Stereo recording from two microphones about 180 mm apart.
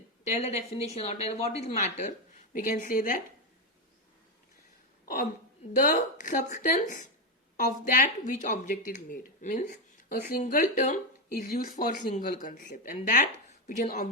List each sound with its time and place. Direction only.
0.3 s a woman's voice: 35° left (ahead or behind)
5.8 s speech: 45° left (ahead or behind)